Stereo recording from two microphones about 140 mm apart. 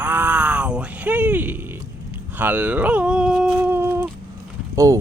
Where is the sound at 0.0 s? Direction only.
10° right (ahead or behind).